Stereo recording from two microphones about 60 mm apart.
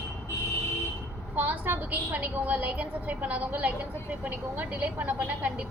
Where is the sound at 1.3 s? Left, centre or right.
Right.